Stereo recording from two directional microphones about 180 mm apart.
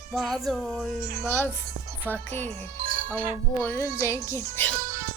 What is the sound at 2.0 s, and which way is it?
Speech, 10° left (ahead or behind).